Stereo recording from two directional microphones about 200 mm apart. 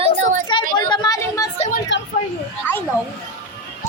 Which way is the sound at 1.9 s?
65° left (ahead or behind).